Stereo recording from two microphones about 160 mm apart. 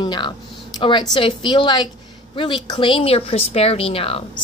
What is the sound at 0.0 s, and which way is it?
A woman's voice, 30° left (ahead or behind).